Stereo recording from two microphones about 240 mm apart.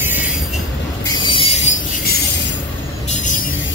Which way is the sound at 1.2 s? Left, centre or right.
Left.